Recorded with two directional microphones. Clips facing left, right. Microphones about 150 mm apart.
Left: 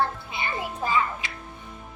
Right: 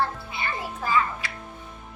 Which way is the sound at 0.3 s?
20° left (ahead or behind).